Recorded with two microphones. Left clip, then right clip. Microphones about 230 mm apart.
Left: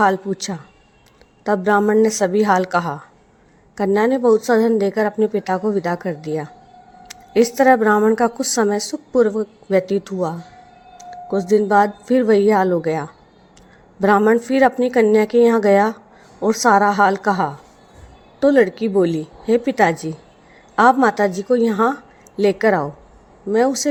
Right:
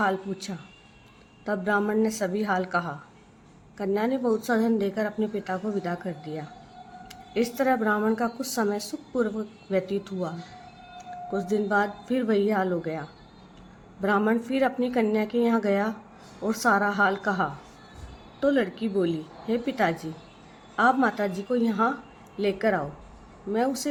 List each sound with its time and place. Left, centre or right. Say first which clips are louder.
0.0 s a woman's voice: left 10 dB; left